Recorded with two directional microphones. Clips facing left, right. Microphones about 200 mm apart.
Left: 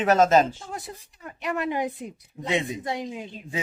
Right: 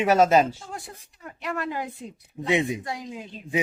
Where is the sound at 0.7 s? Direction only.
20° left (ahead or behind).